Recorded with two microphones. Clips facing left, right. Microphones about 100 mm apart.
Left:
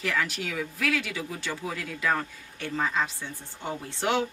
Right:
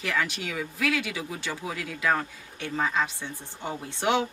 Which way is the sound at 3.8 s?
20° right (ahead or behind).